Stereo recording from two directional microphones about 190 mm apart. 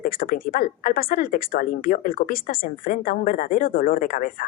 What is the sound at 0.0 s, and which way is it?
Speech, 50° left (ahead or behind).